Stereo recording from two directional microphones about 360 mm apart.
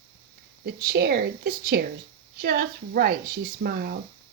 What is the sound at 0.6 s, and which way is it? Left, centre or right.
Speech, right.